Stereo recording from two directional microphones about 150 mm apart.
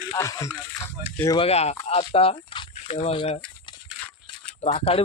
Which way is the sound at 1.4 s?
45° left (ahead or behind).